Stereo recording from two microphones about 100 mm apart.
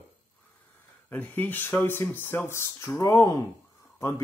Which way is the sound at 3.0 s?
35° left (ahead or behind).